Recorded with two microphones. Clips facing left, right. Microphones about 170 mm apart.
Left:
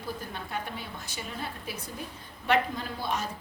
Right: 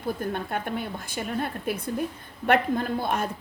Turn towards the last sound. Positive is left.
turn(degrees=-55)  # may be behind; listen again after turning